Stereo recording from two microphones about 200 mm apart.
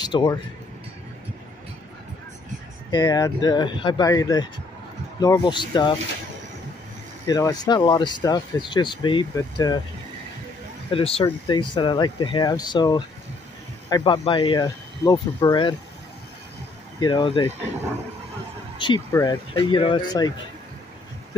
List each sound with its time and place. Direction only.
0.0 s speech: 20° left (ahead or behind)
2.9 s speech: 20° left (ahead or behind)
7.2 s speech: 20° left (ahead or behind)
10.9 s speech: 30° left (ahead or behind)
17.0 s speech: 25° left (ahead or behind)
18.8 s speech: 20° left (ahead or behind)